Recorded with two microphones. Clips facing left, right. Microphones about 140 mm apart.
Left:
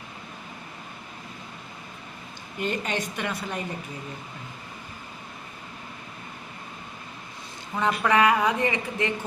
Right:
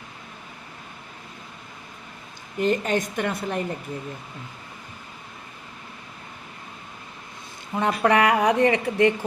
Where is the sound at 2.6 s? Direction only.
45° right (ahead or behind).